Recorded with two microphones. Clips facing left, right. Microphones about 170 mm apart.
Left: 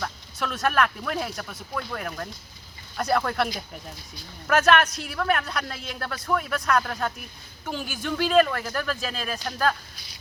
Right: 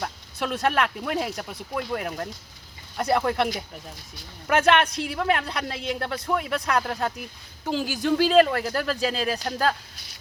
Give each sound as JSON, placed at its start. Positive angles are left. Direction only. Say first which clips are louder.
{"t": 0.0, "sound": "a man's voice", "louder": "right 1 dB", "side_deg": -25}